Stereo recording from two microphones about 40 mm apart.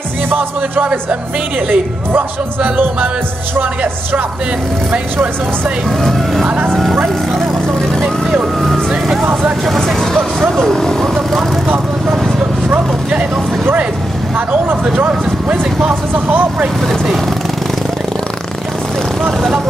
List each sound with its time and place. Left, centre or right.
0.6 s speech: right
2.6 s speech: right
5.9 s speech: centre
9.7 s speech: centre
12.6 s speech: right
14.3 s speech: right
16.1 s speech: right